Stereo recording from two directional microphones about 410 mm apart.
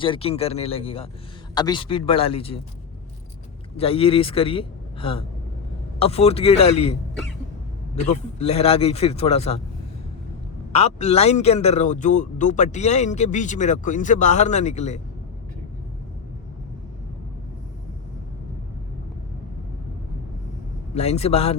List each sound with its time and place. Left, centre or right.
0.0 s a man's voice: centre
3.8 s a man's voice: centre
8.1 s a man's voice: centre
10.7 s a man's voice: centre
20.9 s a man's voice: centre